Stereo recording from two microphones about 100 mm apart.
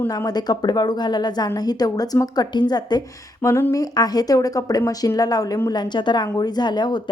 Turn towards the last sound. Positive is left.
turn(degrees=45)  # may be behind; listen again after turning